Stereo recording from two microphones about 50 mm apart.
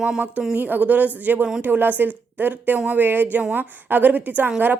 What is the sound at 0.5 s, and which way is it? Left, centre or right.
A woman's voice, right.